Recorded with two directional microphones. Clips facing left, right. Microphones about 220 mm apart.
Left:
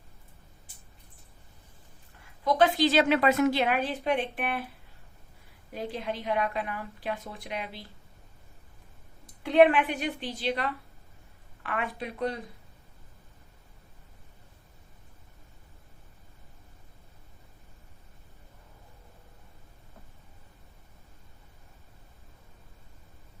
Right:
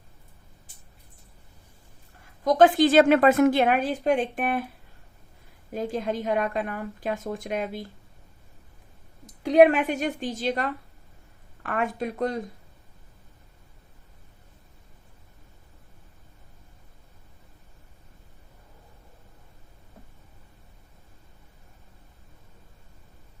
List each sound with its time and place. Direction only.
2.4 s a woman's voice: 45° right (ahead or behind)
5.7 s a woman's voice: 45° right (ahead or behind)
9.2 s a woman's voice: 40° right (ahead or behind)